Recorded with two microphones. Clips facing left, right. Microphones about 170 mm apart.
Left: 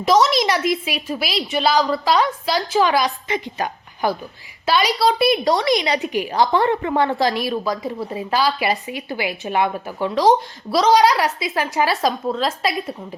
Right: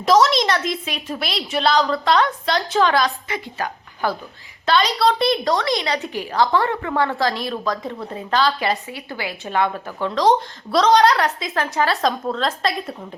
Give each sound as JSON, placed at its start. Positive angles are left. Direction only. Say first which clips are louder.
{"t": 0.0, "sound": "a woman's voice", "louder": "even", "side_deg": 0}
{"t": 3.2, "sound": "a woman's voice", "louder": "left 3 dB", "side_deg": 20}
{"t": 5.5, "sound": "a woman's voice", "louder": "left 3 dB", "side_deg": 15}